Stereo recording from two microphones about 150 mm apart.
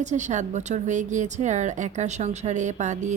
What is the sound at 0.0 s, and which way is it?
A woman's voice, 55° right (ahead or behind).